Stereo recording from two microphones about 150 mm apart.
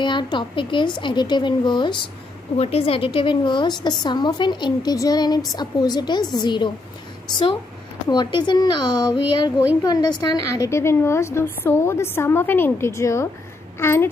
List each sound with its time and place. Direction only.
0.0 s speech: 30° left (ahead or behind)
2.5 s a woman's voice: 45° left (ahead or behind)
8.1 s a woman's voice: 30° left (ahead or behind)